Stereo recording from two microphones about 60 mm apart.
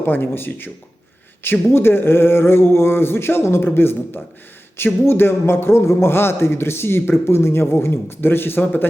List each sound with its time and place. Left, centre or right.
0.0 s a man's voice: left